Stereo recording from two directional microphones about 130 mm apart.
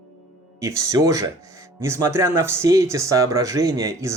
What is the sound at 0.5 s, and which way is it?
Speech, 25° right (ahead or behind).